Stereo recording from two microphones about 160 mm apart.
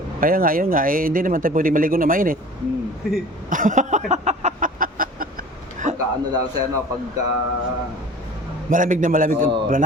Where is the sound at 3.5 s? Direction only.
55° right (ahead or behind).